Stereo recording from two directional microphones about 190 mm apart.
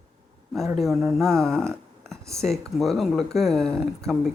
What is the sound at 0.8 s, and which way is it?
Speech, centre (ahead or behind).